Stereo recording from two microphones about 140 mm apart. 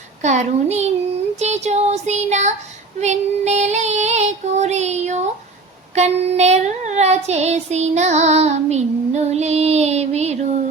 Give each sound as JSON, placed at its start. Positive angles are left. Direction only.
{"t": 0.2, "sound": "a child's voice", "side_deg": -55}
{"t": 1.4, "sound": "child singing", "side_deg": -50}